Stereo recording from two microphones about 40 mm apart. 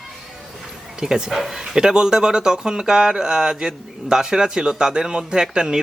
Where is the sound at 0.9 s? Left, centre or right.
Centre.